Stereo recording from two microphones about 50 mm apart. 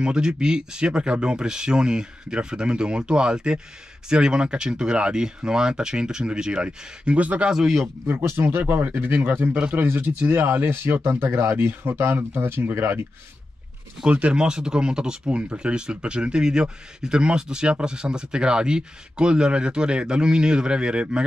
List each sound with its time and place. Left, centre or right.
0.0 s speech: centre
7.5 s speech: centre
8.4 s speech: right
11.1 s speech: right
14.0 s speech: right